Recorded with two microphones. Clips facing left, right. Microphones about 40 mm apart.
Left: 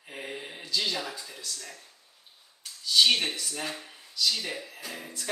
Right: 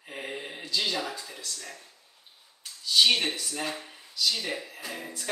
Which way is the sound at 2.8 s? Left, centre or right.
Centre.